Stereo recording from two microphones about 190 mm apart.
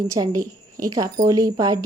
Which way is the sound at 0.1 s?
20° right (ahead or behind).